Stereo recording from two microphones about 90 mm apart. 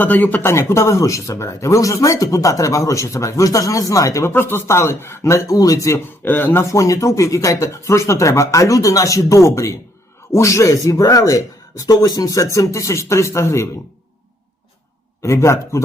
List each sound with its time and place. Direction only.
0.0 s speech: 20° left (ahead or behind)
0.5 s speech: 30° left (ahead or behind)
6.2 s speech: 20° left (ahead or behind)
15.2 s speech: 30° left (ahead or behind)